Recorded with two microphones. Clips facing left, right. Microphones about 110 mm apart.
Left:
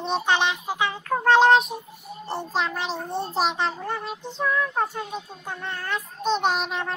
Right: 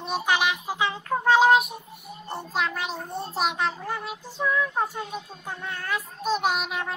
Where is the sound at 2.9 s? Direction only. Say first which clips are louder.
Left 4 dB; 30° left (ahead or behind).